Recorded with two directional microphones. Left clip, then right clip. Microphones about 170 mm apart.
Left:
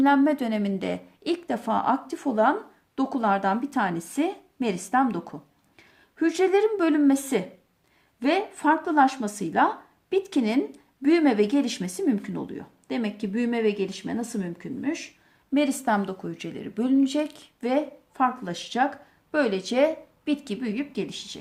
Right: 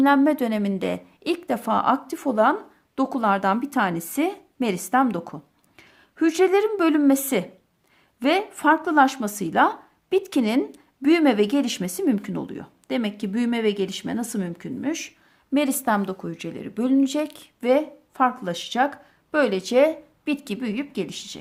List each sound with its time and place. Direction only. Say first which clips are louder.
0.0 s a woman's voice: right 2 dB; 35° right (ahead or behind)